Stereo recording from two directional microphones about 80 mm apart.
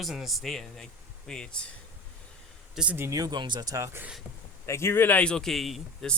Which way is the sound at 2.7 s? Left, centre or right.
Centre.